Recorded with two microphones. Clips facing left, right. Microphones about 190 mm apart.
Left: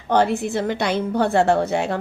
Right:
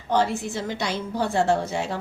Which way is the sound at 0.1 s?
60° left (ahead or behind).